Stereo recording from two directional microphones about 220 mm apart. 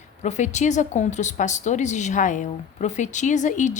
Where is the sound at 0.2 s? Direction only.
30° left (ahead or behind).